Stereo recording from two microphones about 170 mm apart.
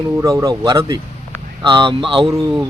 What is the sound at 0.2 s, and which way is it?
Speech, 20° right (ahead or behind).